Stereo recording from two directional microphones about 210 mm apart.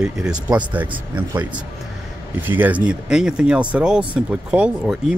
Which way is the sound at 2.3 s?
10° right (ahead or behind).